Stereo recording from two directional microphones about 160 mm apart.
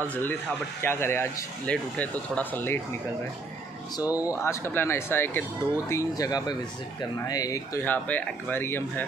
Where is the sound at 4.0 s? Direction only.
10° right (ahead or behind).